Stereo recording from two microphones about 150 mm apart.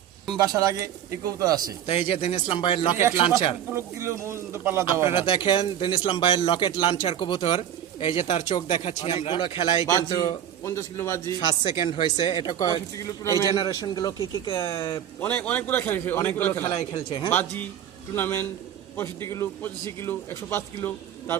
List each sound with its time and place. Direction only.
0.3 s speech: 25° right (ahead or behind)
1.9 s speech: 40° left (ahead or behind)
3.8 s speech: 20° right (ahead or behind)
5.0 s a man's voice: 35° left (ahead or behind)
15.2 s a man's voice: 10° left (ahead or behind); by 17.2 s 30° left (ahead or behind)
17.2 s a man's voice: 10° left (ahead or behind)